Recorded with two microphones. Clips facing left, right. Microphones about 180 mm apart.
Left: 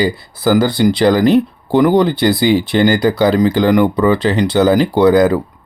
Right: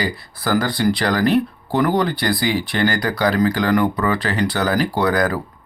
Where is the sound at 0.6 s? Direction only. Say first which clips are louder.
Left 6 dB; centre (ahead or behind).